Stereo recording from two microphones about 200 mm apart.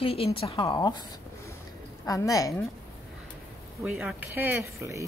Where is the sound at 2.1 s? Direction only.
15° left (ahead or behind).